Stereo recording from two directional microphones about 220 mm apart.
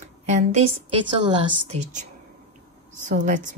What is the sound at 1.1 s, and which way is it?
A woman's voice, 20° right (ahead or behind).